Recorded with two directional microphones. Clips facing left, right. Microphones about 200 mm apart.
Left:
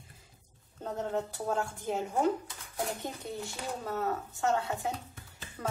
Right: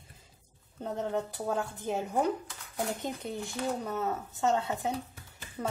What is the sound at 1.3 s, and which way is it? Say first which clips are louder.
Speech: even; 15° right (ahead or behind).